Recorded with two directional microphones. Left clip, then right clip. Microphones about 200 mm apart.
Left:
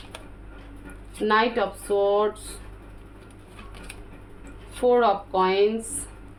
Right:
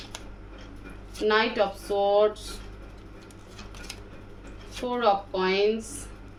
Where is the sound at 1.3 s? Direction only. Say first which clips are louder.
Left 2 dB; 45° left (ahead or behind).